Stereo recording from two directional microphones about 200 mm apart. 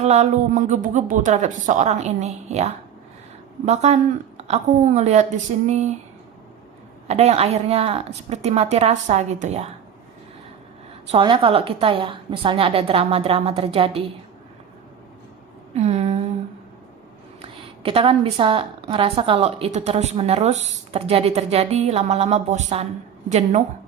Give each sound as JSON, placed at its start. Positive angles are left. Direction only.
{"t": 0.0, "sound": "a woman's voice", "side_deg": -35}
{"t": 7.1, "sound": "a woman's voice", "side_deg": -35}
{"t": 11.1, "sound": "a woman's voice", "side_deg": -25}
{"t": 15.7, "sound": "a sound", "side_deg": -30}
{"t": 17.4, "sound": "a woman's voice", "side_deg": -25}